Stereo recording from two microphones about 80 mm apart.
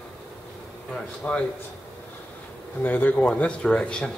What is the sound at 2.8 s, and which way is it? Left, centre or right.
A man's voice, left.